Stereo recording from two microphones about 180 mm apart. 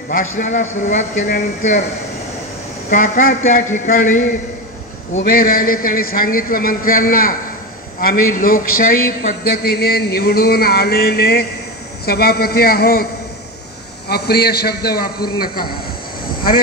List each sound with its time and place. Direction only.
0.4 s a man's voice: 45° left (ahead or behind)
2.9 s a man's voice: 45° left (ahead or behind)
5.1 s a man's voice: 55° left (ahead or behind)